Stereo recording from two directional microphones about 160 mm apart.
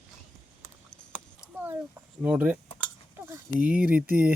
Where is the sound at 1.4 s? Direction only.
10° right (ahead or behind).